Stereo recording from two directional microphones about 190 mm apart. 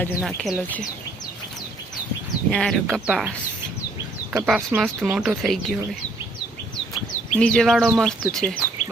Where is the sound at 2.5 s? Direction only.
5° left (ahead or behind).